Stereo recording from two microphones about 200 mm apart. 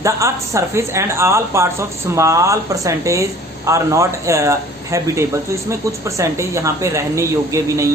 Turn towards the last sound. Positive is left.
turn(degrees=-15)  # may be behind; listen again after turning